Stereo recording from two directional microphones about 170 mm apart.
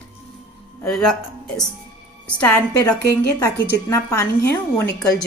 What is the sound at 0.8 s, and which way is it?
Speech, 5° left (ahead or behind).